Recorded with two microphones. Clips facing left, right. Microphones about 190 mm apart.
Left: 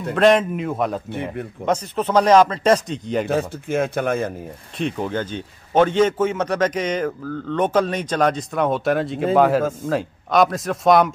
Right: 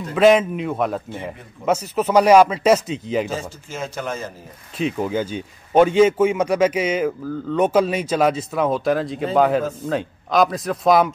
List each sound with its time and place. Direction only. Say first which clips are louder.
0.1 s a man's voice: right 1 dB; 5° right (ahead or behind)
3.3 s speech: left 7 dB; 60° left (ahead or behind)
4.7 s a man's voice: right 2 dB; 5° right (ahead or behind)